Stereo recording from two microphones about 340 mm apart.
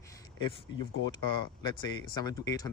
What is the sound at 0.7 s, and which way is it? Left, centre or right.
Speech, left.